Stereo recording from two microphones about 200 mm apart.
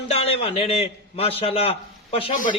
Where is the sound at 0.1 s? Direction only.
30° left (ahead or behind).